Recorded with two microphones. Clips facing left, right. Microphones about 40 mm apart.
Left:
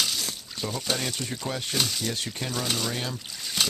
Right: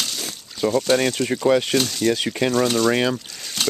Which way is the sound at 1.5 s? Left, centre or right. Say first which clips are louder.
Right 16 dB; right.